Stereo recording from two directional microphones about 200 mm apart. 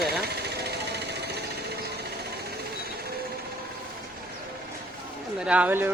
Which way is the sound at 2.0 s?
55° right (ahead or behind).